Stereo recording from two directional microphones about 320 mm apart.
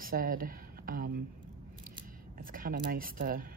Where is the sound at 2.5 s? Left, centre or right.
Right.